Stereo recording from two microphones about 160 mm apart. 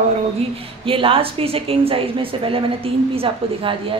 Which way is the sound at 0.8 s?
35° right (ahead or behind).